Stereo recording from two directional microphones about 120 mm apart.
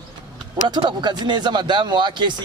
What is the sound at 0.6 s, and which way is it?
Speech, 40° right (ahead or behind).